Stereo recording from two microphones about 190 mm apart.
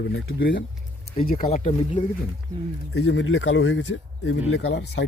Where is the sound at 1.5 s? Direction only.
35° left (ahead or behind).